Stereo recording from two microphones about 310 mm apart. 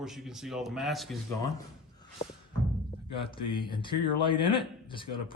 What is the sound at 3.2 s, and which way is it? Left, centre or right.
Speech, centre.